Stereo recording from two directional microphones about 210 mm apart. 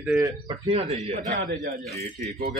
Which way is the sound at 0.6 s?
30° right (ahead or behind).